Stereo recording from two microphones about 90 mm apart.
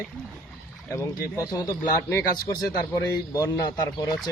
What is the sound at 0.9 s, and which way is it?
Speech, 35° left (ahead or behind).